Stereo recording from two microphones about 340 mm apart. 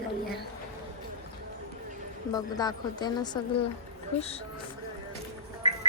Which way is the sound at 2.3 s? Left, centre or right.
Centre.